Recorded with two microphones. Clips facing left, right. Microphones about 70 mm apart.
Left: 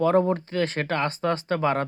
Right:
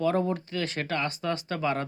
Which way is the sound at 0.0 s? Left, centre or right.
Left.